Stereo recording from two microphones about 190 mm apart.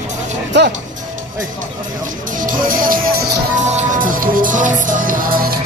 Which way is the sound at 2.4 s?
45° right (ahead or behind).